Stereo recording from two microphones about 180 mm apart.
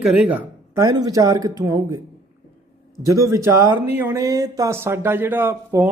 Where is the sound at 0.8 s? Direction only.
20° right (ahead or behind).